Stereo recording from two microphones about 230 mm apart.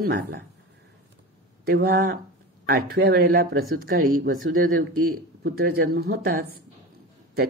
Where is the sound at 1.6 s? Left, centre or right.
Right.